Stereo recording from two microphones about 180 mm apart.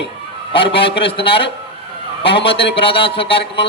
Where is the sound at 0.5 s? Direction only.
30° left (ahead or behind).